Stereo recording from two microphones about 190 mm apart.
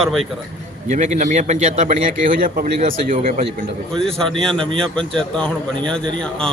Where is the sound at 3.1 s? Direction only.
30° right (ahead or behind).